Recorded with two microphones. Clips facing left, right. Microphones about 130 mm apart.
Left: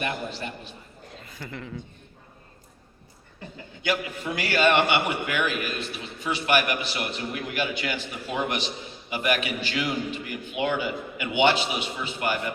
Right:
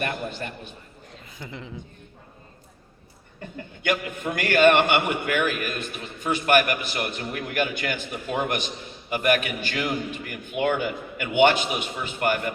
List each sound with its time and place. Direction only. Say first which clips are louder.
0.0 s a man's voice: right 1 dB; 50° right (ahead or behind)
1.4 s speech: left 1 dB; 5° right (ahead or behind)
3.8 s a man's voice: right 2 dB; 50° right (ahead or behind)